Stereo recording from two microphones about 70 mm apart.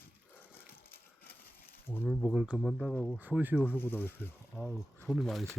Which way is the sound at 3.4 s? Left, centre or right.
Right.